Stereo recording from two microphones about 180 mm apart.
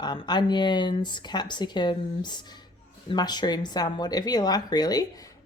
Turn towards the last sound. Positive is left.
turn(degrees=20)  # may be behind; listen again after turning